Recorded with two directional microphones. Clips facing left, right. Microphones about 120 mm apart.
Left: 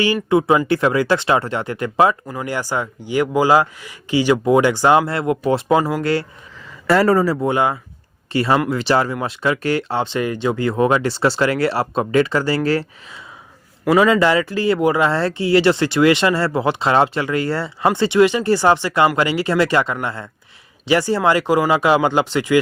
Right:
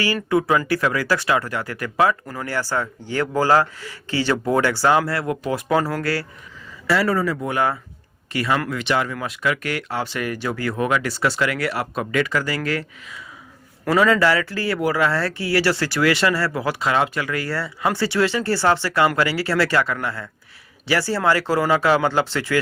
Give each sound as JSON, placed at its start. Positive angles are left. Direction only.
{"t": 0.0, "sound": "speech", "side_deg": 20}
{"t": 6.7, "sound": "speech", "side_deg": 50}
{"t": 13.8, "sound": "speech", "side_deg": 15}